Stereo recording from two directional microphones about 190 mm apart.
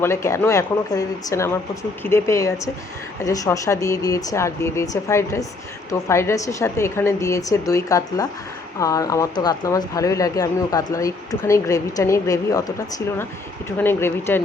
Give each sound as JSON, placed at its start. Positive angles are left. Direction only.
{"t": 0.0, "sound": "speech", "side_deg": 15}